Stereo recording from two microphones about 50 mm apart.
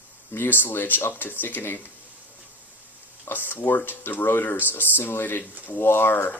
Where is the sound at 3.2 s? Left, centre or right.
Left.